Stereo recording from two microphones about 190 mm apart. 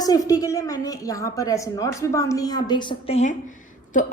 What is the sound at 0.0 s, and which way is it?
A woman's voice, 20° left (ahead or behind).